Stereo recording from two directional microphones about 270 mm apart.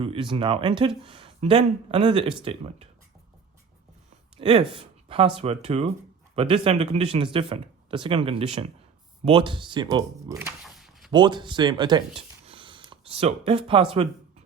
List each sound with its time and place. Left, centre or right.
0.0 s speech: centre
4.4 s speech: centre
4.8 s a sound: centre
5.4 s speech: right
10.6 s a sound: centre
11.1 s speech: centre